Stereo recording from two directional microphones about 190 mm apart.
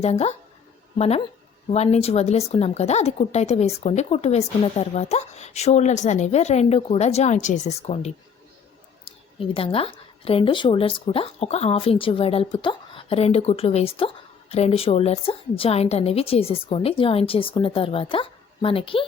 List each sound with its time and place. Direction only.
0.0 s speech: 35° left (ahead or behind)
9.5 s speech: 30° left (ahead or behind)